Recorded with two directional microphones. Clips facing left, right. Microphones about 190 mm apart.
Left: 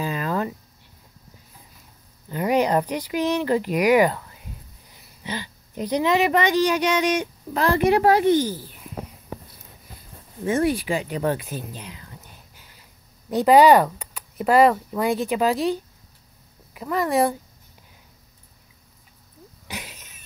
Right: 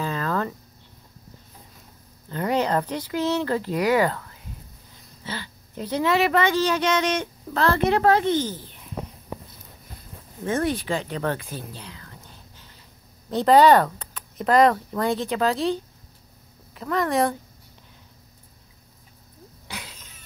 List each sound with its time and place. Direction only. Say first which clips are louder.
0.0 s a sound: left 1 dB; 15° left (ahead or behind)
2.2 s speech: left 3 dB; 15° left (ahead or behind)
10.4 s speech: left 3 dB; 15° left (ahead or behind)
13.3 s speech: left 1 dB; 10° left (ahead or behind)
19.7 s cough: left 2 dB; 15° left (ahead or behind)